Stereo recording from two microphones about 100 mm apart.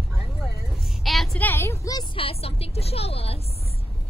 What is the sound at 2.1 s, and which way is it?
A woman's voice, 75° left (ahead or behind).